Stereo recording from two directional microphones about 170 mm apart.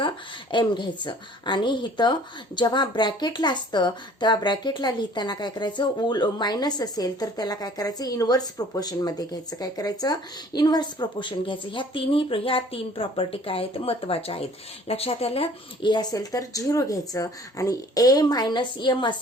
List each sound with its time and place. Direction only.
0.5 s a woman's voice: 25° left (ahead or behind)